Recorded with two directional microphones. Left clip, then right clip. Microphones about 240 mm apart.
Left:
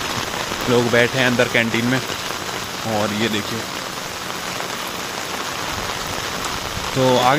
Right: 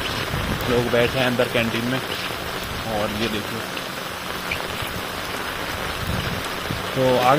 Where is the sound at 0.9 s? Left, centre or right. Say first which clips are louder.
Left 3 dB; left.